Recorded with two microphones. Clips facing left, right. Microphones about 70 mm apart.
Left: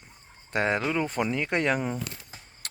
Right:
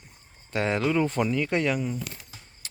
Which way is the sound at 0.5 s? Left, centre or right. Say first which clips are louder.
Even; left.